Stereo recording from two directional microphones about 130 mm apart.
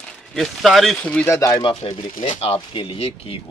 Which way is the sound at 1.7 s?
50° left (ahead or behind).